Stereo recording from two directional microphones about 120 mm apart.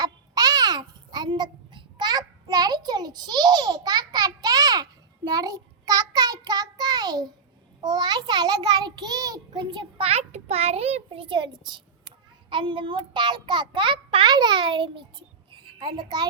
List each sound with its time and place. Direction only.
0.0 s babbling: 35° right (ahead or behind)
7.8 s a child's voice: 35° right (ahead or behind)
10.0 s a child's voice: 60° right (ahead or behind); by 15.0 s 45° right (ahead or behind)
15.5 s a sound: 40° right (ahead or behind)